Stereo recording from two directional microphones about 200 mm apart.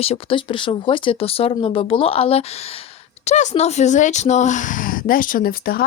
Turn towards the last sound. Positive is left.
turn(degrees=50)  # may be behind; listen again after turning